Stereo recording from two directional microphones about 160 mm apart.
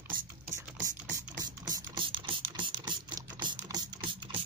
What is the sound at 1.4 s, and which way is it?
Ratchet, 30° right (ahead or behind).